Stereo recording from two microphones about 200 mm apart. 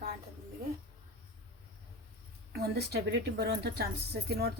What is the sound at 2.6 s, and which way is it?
Speech, 55° right (ahead or behind).